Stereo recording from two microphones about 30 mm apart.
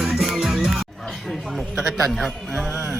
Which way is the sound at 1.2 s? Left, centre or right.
Centre.